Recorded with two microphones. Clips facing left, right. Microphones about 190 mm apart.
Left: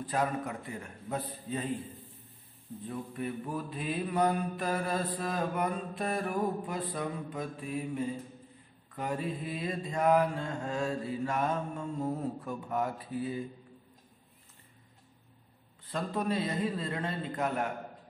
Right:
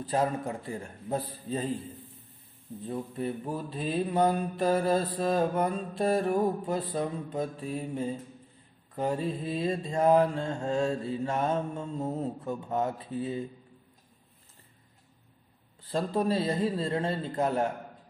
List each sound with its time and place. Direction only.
0.0 s mantra: 30° right (ahead or behind)
2.9 s mantra: 30° right (ahead or behind)
15.9 s a man's voice: 30° right (ahead or behind)